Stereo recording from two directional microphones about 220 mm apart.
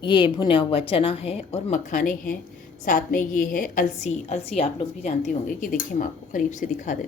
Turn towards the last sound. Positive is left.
turn(degrees=35)  # may be behind; listen again after turning